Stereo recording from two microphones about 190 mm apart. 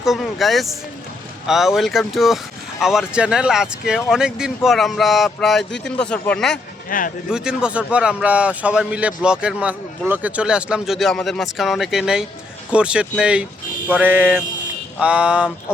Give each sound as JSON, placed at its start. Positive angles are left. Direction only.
{"t": 0.0, "sound": "a man's voice", "side_deg": 0}
{"t": 6.9, "sound": "speech", "side_deg": 45}
{"t": 7.3, "sound": "a man's voice", "side_deg": -5}